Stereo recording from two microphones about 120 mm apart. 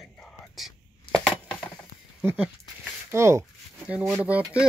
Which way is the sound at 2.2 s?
10° right (ahead or behind).